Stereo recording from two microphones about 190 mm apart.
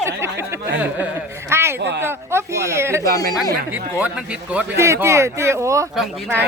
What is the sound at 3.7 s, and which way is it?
A man's voice, 5° right (ahead or behind).